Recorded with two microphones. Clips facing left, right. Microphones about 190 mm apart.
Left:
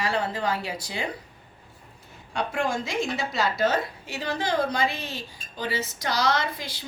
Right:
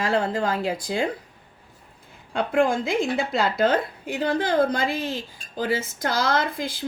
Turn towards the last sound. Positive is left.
turn(degrees=-50)  # may be behind; listen again after turning